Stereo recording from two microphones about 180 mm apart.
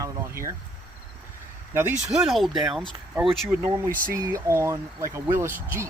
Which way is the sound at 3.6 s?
15° right (ahead or behind).